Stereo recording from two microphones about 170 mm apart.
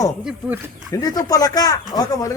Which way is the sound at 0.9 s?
20° left (ahead or behind).